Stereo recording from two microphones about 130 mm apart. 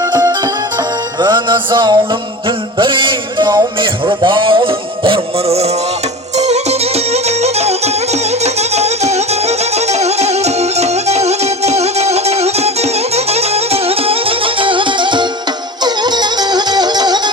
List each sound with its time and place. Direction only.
0.0 s music: 25° right (ahead or behind)